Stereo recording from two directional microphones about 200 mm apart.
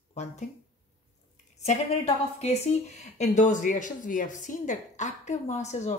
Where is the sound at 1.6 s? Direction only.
35° left (ahead or behind).